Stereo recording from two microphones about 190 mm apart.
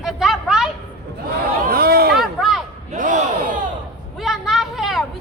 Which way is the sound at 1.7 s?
50° right (ahead or behind).